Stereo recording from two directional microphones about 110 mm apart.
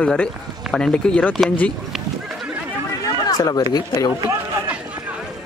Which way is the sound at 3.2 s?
35° left (ahead or behind).